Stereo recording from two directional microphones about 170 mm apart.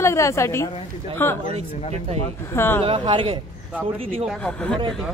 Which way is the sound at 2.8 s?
30° right (ahead or behind).